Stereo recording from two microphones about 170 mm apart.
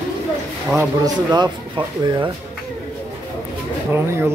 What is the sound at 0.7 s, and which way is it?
Speech, 20° right (ahead or behind).